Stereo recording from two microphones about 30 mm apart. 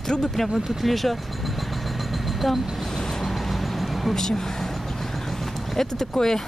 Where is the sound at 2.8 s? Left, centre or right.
Centre.